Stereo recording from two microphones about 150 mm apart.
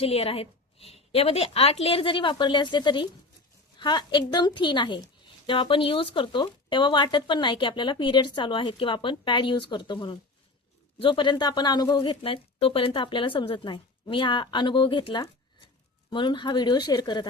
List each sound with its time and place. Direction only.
0.0 s a woman's voice: 40° left (ahead or behind)